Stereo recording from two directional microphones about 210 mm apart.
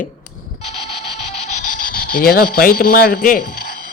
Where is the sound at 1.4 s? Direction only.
35° left (ahead or behind).